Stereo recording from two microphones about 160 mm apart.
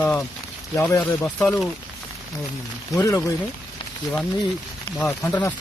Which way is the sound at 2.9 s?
20° left (ahead or behind).